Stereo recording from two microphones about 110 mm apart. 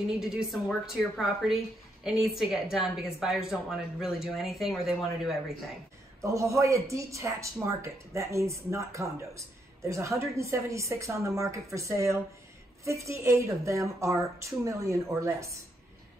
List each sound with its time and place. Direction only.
0.1 s speech: 5° right (ahead or behind)
6.2 s a woman's voice: 30° right (ahead or behind)